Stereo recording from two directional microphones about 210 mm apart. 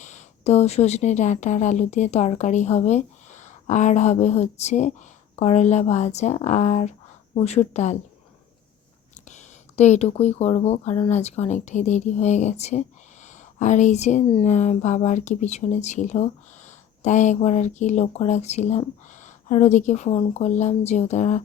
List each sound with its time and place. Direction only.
0.0 s speech: 35° left (ahead or behind)
9.3 s speech: 35° left (ahead or behind)